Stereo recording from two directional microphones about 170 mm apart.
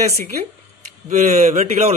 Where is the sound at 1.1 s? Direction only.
40° right (ahead or behind).